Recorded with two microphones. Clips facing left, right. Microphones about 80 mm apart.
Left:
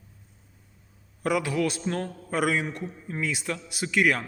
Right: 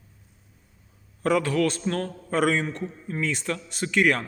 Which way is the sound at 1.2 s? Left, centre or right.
Centre.